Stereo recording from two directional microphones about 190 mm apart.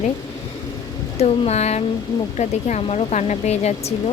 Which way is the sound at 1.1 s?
35° left (ahead or behind).